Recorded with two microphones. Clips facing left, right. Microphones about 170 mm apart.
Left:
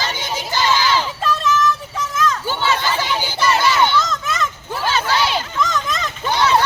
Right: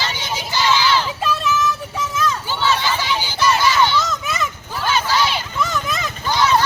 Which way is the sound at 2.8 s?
50° left (ahead or behind).